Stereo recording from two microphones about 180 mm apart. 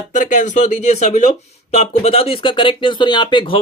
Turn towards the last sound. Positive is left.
turn(degrees=25)  # may be behind; listen again after turning